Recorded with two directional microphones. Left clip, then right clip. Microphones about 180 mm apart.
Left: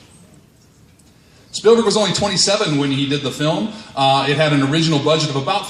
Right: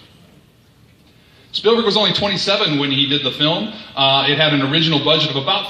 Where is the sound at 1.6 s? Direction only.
45° left (ahead or behind).